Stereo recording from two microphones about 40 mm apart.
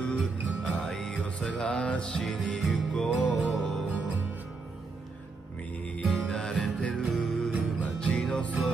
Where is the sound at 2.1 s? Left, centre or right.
Centre.